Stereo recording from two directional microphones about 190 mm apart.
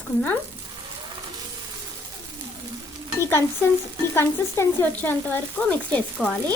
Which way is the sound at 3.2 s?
10° left (ahead or behind).